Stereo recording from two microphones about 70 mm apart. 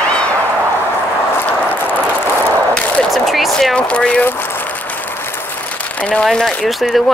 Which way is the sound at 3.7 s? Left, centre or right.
Centre.